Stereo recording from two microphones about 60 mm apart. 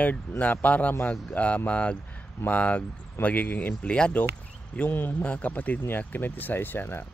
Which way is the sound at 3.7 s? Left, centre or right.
Centre.